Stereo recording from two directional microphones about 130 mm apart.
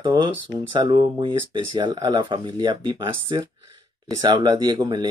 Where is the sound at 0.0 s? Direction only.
35° right (ahead or behind).